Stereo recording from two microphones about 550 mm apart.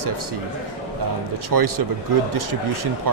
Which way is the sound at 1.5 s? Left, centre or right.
Right.